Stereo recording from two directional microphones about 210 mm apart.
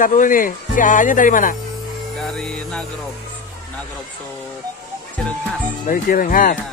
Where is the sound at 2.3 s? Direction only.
5° left (ahead or behind).